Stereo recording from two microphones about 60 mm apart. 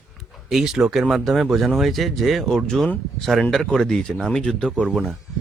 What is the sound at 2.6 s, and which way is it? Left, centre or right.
Speech, centre.